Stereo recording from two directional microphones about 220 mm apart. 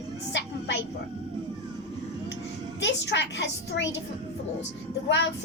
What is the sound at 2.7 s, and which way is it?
A child's voice, 55° left (ahead or behind).